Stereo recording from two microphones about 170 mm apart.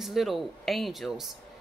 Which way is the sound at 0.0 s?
Centre (ahead or behind).